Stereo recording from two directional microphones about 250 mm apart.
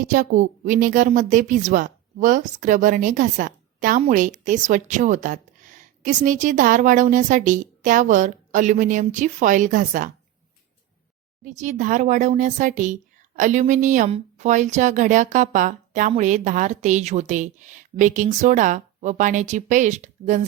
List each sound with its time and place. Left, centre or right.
0.0 s a woman's voice: right
11.4 s speech: right